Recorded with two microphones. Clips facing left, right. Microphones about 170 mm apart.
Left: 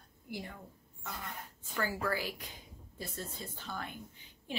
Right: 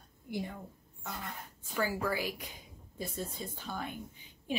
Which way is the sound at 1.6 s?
15° right (ahead or behind).